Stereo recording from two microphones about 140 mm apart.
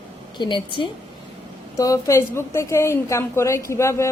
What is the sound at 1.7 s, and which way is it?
A woman's voice, 25° left (ahead or behind).